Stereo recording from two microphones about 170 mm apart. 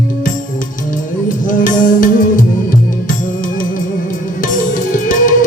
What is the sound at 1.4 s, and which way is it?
Music, 50° left (ahead or behind).